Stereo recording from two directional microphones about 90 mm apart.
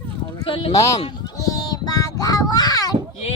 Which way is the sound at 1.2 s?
40° left (ahead or behind).